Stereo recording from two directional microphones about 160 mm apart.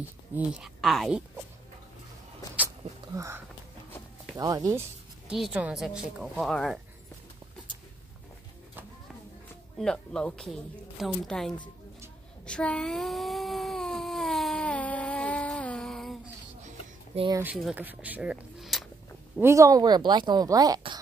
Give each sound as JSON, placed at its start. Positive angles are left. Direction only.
{"t": 0.3, "sound": "speech", "side_deg": -5}
{"t": 3.2, "sound": "a woman's voice", "side_deg": -15}
{"t": 5.3, "sound": "speech", "side_deg": -5}
{"t": 9.8, "sound": "speech", "side_deg": 5}
{"t": 12.4, "sound": "a sound", "side_deg": 5}
{"t": 16.6, "sound": "a sound", "side_deg": -40}
{"t": 17.3, "sound": "speech", "side_deg": -15}
{"t": 19.4, "sound": "a woman's voice", "side_deg": -20}